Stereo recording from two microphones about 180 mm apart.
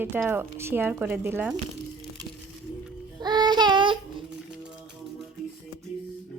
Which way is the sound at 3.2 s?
25° right (ahead or behind).